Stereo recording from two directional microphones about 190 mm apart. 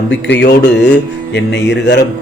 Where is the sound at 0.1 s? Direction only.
65° left (ahead or behind).